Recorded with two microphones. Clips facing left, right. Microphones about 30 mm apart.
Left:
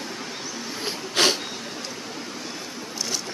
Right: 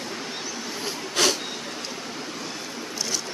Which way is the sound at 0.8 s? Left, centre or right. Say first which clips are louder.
Left 2 dB; left.